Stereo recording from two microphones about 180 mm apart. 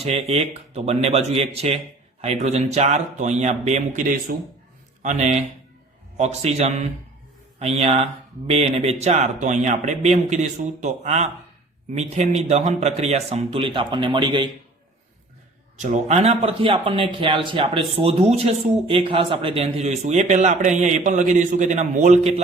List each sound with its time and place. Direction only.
0.0 s a man's voice: 35° right (ahead or behind)
15.8 s a man's voice: 40° right (ahead or behind)